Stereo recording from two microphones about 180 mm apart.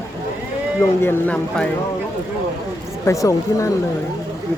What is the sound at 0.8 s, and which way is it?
Speech, 5° left (ahead or behind).